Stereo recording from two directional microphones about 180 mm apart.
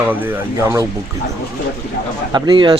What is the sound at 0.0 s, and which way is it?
Speech, 10° right (ahead or behind).